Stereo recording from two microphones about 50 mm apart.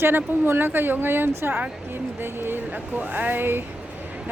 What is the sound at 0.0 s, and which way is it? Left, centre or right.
Speech, right.